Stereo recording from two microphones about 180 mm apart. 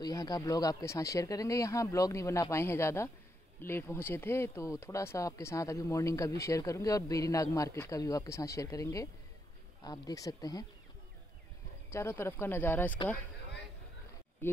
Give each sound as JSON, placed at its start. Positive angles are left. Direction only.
{"t": 0.0, "sound": "speech", "side_deg": 20}
{"t": 11.9, "sound": "speech", "side_deg": 15}